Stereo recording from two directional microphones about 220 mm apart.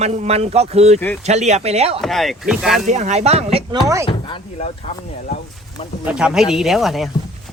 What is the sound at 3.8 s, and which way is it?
Speech, 15° right (ahead or behind).